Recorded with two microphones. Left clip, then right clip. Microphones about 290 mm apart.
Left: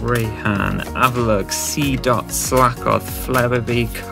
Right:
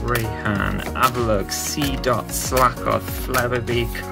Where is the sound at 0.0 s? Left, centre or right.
Centre.